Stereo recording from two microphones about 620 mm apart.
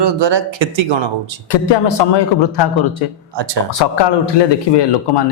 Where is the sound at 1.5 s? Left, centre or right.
Left.